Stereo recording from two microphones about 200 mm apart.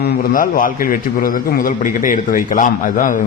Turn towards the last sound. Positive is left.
turn(degrees=40)  # may be behind; listen again after turning